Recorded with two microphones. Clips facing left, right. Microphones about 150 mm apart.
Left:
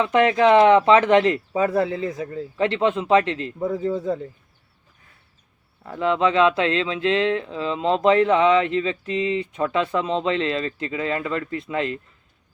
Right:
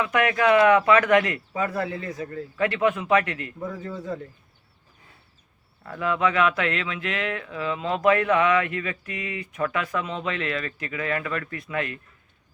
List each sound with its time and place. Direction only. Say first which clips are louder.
0.0 s speech: left 5 dB; 25° left (ahead or behind)
5.8 s speech: left 4 dB; 20° left (ahead or behind)